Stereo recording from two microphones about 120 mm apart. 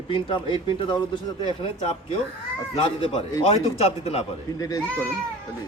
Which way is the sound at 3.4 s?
60° left (ahead or behind).